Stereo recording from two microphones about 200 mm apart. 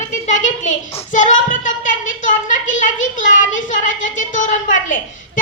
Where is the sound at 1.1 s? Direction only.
40° left (ahead or behind).